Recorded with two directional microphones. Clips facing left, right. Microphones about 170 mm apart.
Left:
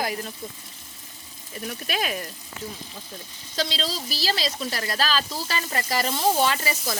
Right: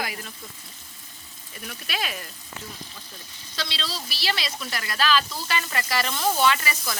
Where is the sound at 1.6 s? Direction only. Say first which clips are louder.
Left 4 dB; 40° left (ahead or behind).